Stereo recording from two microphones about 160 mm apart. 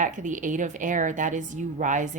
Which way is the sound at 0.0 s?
50° right (ahead or behind).